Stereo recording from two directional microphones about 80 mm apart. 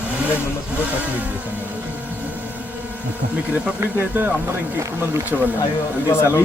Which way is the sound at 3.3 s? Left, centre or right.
Centre.